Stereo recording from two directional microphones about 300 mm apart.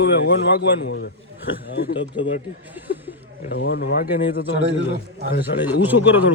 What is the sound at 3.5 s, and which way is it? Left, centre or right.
Speech, left.